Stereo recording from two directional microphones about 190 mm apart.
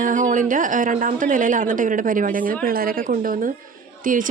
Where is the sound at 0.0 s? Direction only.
45° right (ahead or behind).